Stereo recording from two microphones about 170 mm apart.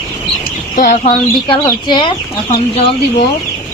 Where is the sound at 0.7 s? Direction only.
50° left (ahead or behind).